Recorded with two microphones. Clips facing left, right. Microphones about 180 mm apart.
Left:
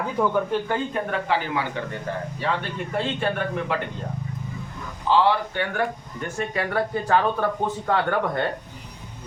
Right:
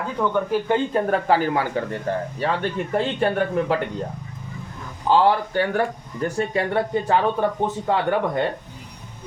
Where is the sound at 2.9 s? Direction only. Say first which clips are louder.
Right 3 dB; 40° right (ahead or behind).